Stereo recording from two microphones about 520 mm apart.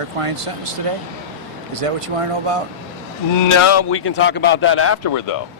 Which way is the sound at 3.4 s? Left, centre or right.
Left.